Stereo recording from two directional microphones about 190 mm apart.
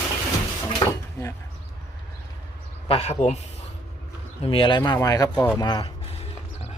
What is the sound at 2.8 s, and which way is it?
Speech, 35° left (ahead or behind).